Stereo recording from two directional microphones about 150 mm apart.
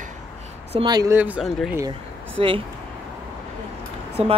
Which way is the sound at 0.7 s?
30° right (ahead or behind).